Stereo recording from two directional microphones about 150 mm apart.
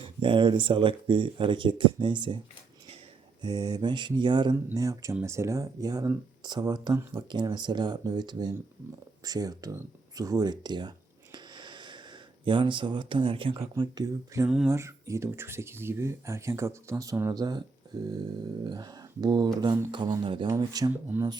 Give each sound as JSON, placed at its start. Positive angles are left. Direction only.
{"t": 0.0, "sound": "speech", "side_deg": -35}
{"t": 3.4, "sound": "speech", "side_deg": -25}
{"t": 14.4, "sound": "a sound", "side_deg": -5}
{"t": 14.7, "sound": "speech", "side_deg": -20}
{"t": 20.9, "sound": "speech", "side_deg": -10}